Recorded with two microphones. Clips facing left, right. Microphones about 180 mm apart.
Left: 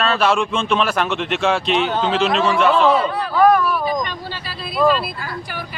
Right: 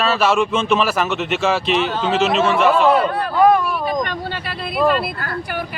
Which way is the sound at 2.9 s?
55° right (ahead or behind).